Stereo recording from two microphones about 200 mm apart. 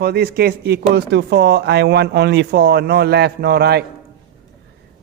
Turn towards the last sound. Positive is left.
turn(degrees=-55)  # may be behind; listen again after turning